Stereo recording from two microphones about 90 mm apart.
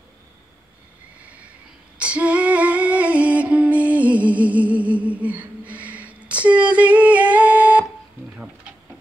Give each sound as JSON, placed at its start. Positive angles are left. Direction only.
{"t": 1.2, "sound": "neigh", "side_deg": -15}
{"t": 2.0, "sound": "female singing", "side_deg": -15}